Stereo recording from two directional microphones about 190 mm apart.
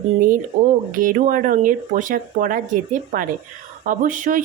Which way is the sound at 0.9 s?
45° right (ahead or behind).